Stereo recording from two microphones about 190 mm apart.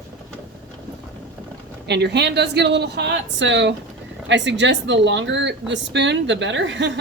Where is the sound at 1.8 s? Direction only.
65° right (ahead or behind).